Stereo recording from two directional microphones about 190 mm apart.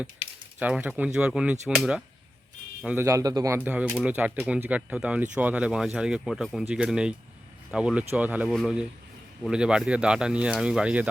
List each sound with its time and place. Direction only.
0.6 s speech: 5° right (ahead or behind)
2.8 s speech: 10° right (ahead or behind)